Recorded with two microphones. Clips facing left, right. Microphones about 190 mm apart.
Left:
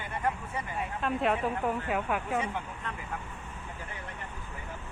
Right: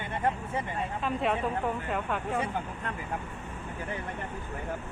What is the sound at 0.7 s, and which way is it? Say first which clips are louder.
Speech: left 3 dB; centre (ahead or behind).